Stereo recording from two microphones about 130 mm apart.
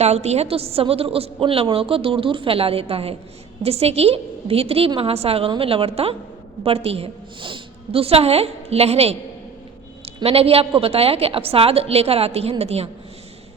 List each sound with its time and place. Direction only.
0.0 s a woman's voice: 55° right (ahead or behind)
10.2 s a woman's voice: 50° right (ahead or behind)